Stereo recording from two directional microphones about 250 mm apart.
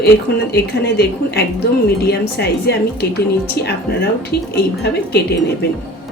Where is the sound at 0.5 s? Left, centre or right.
Left.